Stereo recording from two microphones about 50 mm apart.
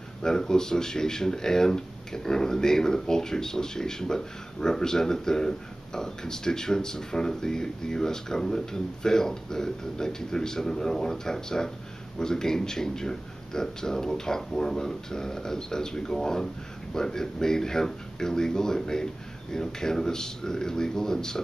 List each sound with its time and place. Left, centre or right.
0.2 s speech: centre